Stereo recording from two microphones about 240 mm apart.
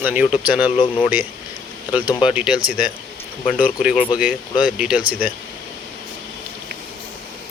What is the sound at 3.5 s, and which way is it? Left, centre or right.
Speech, centre.